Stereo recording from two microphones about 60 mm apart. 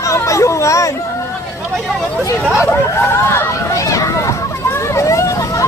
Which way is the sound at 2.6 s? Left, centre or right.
Left.